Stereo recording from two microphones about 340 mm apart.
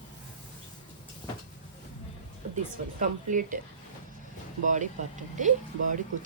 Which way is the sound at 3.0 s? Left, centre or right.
Right.